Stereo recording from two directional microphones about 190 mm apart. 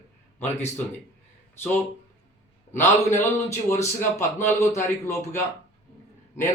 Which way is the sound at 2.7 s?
10° left (ahead or behind).